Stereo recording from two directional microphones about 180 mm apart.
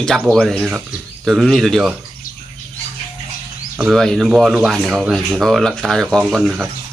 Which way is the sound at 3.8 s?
Centre (ahead or behind).